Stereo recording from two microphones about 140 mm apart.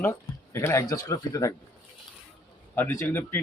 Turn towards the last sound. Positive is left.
turn(degrees=15)  # may be behind; listen again after turning